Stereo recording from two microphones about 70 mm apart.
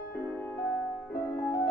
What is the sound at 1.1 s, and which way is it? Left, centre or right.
Music, left.